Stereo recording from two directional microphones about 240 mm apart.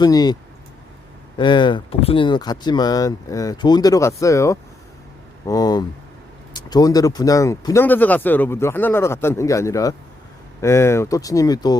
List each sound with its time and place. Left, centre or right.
0.0 s speech: centre
1.4 s speech: centre